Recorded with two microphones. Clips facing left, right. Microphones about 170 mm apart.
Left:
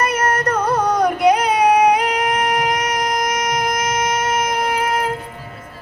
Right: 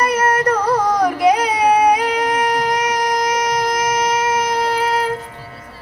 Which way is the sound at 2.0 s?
30° right (ahead or behind).